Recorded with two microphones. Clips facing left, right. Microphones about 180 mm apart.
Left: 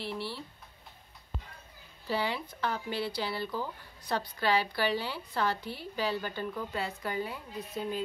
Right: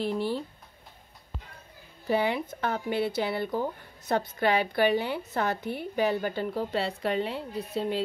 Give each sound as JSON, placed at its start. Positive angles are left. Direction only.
{"t": 0.0, "sound": "a woman's voice", "side_deg": -45}
{"t": 2.0, "sound": "a woman's voice", "side_deg": -55}
{"t": 6.3, "sound": "speech", "side_deg": -30}
{"t": 7.0, "sound": "a woman's voice", "side_deg": -70}
{"t": 7.3, "sound": "a woman's voice", "side_deg": -30}